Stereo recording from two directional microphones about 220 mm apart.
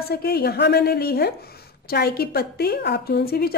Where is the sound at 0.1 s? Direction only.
45° left (ahead or behind).